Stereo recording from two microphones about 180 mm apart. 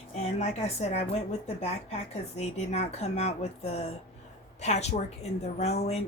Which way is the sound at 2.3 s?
35° left (ahead or behind).